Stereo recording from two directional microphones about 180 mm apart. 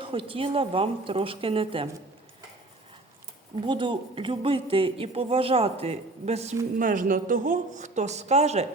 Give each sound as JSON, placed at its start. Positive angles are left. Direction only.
{"t": 0.0, "sound": "a woman's voice", "side_deg": -30}
{"t": 3.5, "sound": "speech", "side_deg": -25}
{"t": 6.7, "sound": "speech", "side_deg": -50}